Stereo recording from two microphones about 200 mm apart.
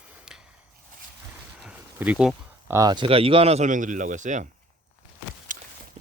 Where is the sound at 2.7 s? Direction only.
20° right (ahead or behind); by 4.4 s 40° right (ahead or behind).